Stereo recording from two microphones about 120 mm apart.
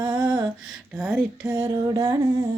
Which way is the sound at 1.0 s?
5° right (ahead or behind).